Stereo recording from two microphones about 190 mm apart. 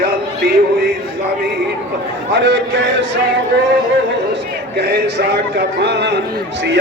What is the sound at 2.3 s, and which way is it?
Speech, 65° right (ahead or behind).